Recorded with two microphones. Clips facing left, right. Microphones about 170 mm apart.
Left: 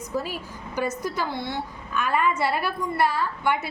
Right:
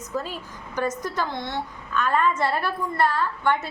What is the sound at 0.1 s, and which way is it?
A woman's voice, 10° left (ahead or behind).